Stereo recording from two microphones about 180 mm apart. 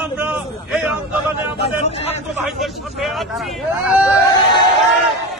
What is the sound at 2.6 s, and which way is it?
Speech, centre (ahead or behind).